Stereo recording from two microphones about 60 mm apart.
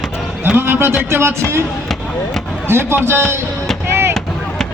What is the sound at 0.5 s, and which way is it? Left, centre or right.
Speech, right.